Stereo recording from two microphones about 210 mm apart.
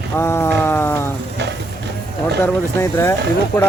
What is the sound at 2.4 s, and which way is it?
Speech, 10° left (ahead or behind).